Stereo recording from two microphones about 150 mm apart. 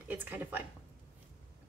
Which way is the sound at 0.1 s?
10° right (ahead or behind).